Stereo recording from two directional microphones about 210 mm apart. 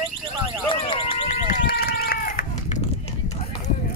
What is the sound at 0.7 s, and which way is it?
Car alarm, 25° left (ahead or behind).